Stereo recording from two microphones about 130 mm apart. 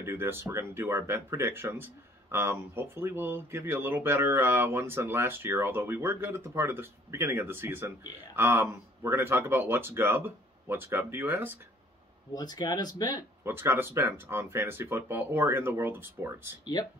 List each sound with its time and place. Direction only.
0.0 s speech: 20° right (ahead or behind)
12.4 s speech: 30° left (ahead or behind)
13.4 s speech: 15° right (ahead or behind)
16.8 s speech: 30° left (ahead or behind)